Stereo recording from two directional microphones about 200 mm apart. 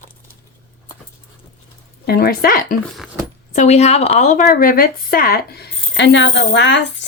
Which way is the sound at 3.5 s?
35° left (ahead or behind).